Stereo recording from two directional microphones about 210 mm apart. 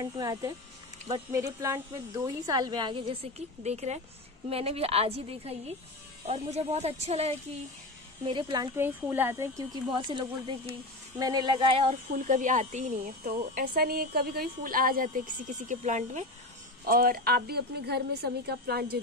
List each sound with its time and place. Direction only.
0.0 s a woman's voice: 20° right (ahead or behind)
12.2 s a woman's voice: 40° right (ahead or behind)